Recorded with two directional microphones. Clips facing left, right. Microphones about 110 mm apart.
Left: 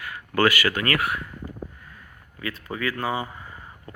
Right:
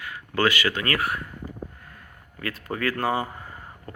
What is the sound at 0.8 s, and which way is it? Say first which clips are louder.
Speech: left 1 dB; 30° right (ahead or behind).